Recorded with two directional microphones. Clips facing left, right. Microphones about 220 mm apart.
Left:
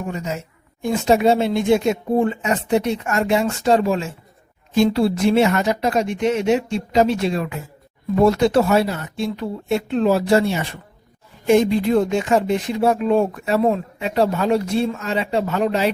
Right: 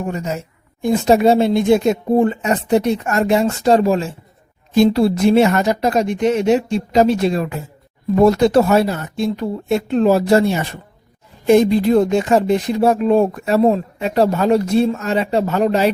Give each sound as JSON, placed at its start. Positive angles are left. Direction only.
{"t": 0.8, "sound": "speech", "side_deg": -40}